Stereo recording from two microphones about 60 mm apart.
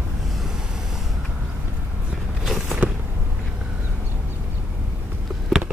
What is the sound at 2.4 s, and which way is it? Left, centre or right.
Walk, centre.